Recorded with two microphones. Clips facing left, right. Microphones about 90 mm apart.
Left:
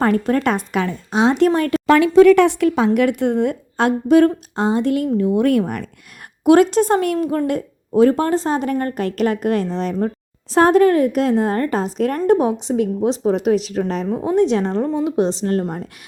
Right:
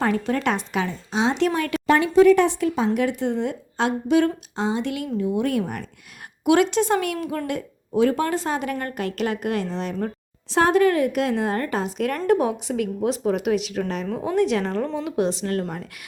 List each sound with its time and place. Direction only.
0.0 s a woman's voice: 50° left (ahead or behind)
1.9 s a woman's voice: 85° left; by 5.8 s 55° left (ahead or behind)
6.4 s a woman's voice: 40° left (ahead or behind)
14.1 s a woman's voice: 25° left (ahead or behind)